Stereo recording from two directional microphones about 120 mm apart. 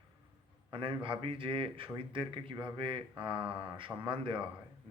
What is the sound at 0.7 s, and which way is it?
A man's voice, 45° right (ahead or behind).